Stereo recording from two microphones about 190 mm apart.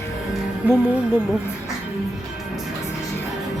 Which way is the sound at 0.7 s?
5° right (ahead or behind).